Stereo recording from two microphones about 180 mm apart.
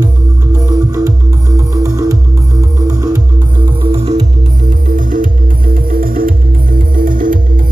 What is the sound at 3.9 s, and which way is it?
Music, 35° right (ahead or behind).